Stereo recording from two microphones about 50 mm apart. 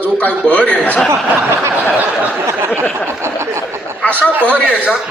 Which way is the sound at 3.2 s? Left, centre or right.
Right.